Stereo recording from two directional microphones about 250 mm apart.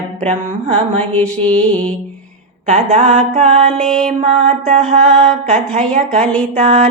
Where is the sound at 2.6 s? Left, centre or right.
Right.